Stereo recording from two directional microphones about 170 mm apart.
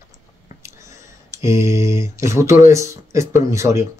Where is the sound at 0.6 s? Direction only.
15° right (ahead or behind).